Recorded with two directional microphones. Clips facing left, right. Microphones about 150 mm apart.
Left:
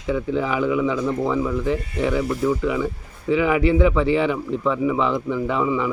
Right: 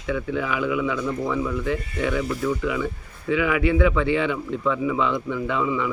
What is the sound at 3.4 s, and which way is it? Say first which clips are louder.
Speech: left 3 dB; 25° left (ahead or behind).